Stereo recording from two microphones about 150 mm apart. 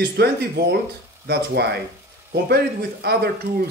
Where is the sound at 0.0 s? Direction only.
90° right.